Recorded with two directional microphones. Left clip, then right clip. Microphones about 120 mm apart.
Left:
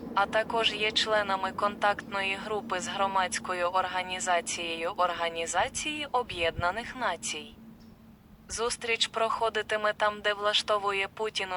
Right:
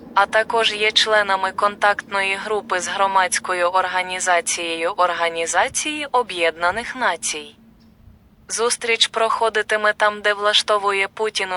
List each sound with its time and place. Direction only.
0.1 s speech: 35° right (ahead or behind)
8.5 s speech: 35° right (ahead or behind)